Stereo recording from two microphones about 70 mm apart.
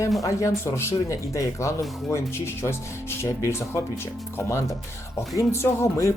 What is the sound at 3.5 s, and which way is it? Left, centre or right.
Speech, left.